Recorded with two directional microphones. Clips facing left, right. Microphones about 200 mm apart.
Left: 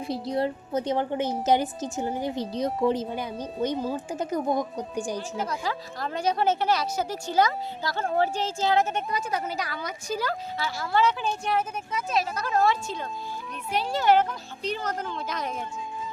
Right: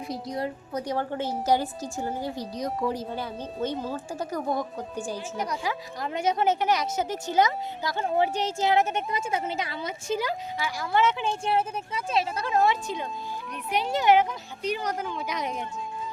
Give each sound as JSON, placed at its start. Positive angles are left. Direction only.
{"t": 0.1, "sound": "a woman's voice", "side_deg": 30}
{"t": 3.1, "sound": "speech", "side_deg": 15}
{"t": 5.4, "sound": "a woman's voice", "side_deg": -15}